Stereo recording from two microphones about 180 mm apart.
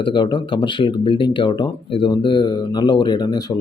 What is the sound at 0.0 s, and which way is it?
Speech, 25° left (ahead or behind).